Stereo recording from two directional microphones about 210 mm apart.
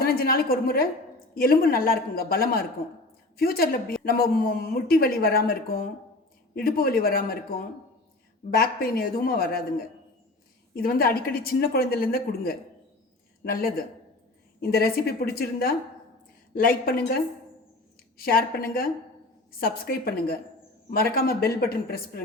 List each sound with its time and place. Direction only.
0.0 s speech: 45° left (ahead or behind)
8.4 s speech: 45° left (ahead or behind)
10.8 s speech: 45° left (ahead or behind)